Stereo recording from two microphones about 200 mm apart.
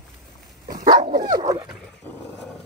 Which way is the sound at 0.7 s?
20° right (ahead or behind).